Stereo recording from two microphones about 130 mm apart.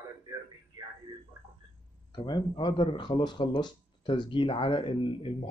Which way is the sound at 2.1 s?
35° left (ahead or behind).